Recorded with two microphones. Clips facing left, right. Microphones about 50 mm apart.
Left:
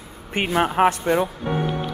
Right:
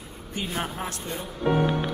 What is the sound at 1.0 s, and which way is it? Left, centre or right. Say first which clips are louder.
Speech: left 14 dB; left.